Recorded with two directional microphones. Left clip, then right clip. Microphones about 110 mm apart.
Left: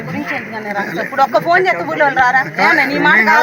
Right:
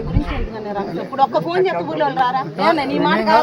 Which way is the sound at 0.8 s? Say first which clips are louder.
Left 3 dB; 10° left (ahead or behind).